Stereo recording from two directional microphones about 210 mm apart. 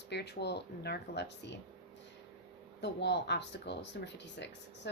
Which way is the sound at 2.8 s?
55° left (ahead or behind).